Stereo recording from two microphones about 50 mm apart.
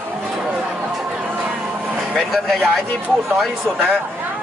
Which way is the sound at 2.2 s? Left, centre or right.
Centre.